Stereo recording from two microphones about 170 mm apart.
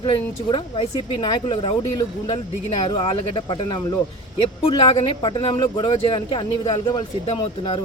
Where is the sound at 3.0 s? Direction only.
30° left (ahead or behind).